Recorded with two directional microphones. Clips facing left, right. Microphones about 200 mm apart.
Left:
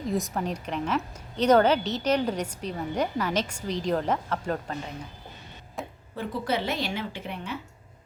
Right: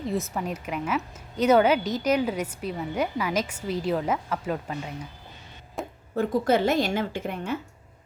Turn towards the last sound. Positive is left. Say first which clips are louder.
# right 5 dB
turn(degrees=-45)  # may be behind; listen again after turning